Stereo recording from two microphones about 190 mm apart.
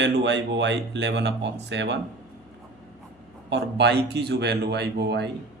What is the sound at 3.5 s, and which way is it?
Speech, 65° right (ahead or behind).